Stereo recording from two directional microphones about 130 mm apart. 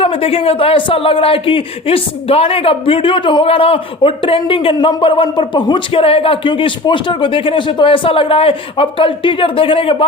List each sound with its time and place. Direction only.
0.0 s speech: 45° left (ahead or behind)